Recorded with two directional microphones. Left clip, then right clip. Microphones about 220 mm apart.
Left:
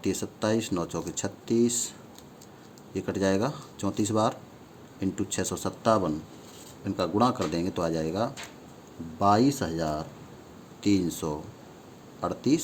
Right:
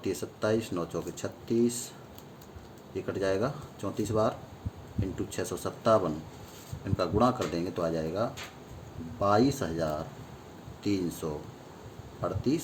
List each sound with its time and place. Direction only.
0.0 s speech: 35° left (ahead or behind)
2.9 s speech: 35° left (ahead or behind)
12.4 s speech: 35° left (ahead or behind)